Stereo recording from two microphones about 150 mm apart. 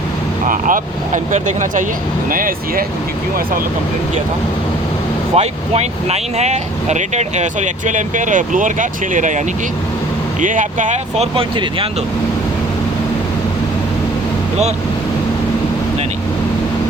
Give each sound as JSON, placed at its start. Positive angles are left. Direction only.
{"t": 0.4, "sound": "speech", "side_deg": -65}
{"t": 5.3, "sound": "speech", "side_deg": -45}
{"t": 10.4, "sound": "speech", "side_deg": -60}
{"t": 11.3, "sound": "speech", "side_deg": -35}